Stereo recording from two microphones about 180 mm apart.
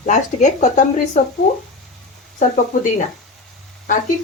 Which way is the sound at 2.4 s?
45° left (ahead or behind).